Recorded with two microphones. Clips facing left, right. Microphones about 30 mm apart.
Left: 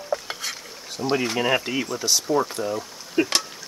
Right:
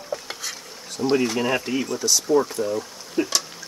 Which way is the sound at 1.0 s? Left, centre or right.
Centre.